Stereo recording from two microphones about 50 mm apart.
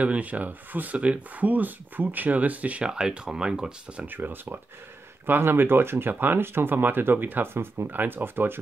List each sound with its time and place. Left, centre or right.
0.0 s speech: right
2.8 s speech: centre
4.1 s speech: right